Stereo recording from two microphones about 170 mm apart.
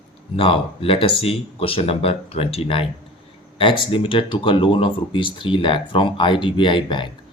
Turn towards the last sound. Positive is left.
turn(degrees=30)  # may be behind; listen again after turning